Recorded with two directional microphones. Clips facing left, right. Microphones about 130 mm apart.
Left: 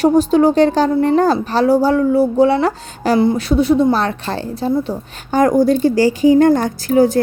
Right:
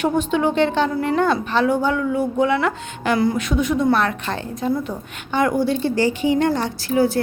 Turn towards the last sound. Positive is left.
turn(degrees=40)  # may be behind; listen again after turning